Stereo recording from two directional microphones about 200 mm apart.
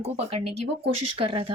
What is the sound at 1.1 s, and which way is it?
Speech, 25° right (ahead or behind).